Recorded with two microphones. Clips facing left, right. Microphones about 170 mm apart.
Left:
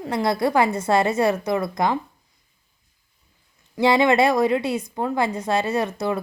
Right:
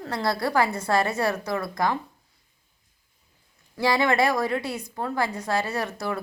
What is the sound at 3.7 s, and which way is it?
A woman's voice, 20° left (ahead or behind).